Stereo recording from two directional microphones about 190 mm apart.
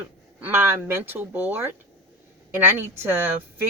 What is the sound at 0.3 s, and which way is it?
Speech, 10° right (ahead or behind).